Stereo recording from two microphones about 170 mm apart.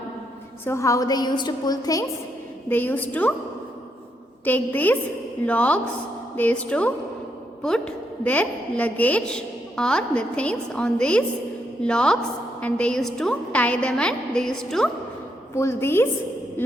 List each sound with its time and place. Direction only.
0.6 s a woman's voice: 15° left (ahead or behind)
2.6 s a woman's voice: 10° left (ahead or behind)
4.4 s a woman's voice: 10° left (ahead or behind)
15.5 s a woman's voice: 15° left (ahead or behind)